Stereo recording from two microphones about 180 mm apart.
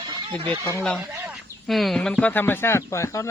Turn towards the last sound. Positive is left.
turn(degrees=15)  # may be behind; listen again after turning